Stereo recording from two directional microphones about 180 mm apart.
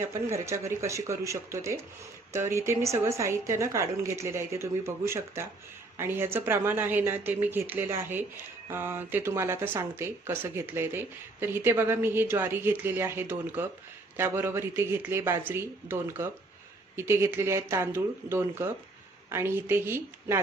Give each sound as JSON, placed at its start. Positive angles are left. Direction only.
{"t": 0.0, "sound": "speech", "side_deg": -15}